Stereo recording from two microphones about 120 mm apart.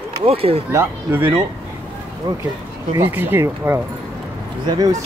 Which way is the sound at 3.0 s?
15° right (ahead or behind).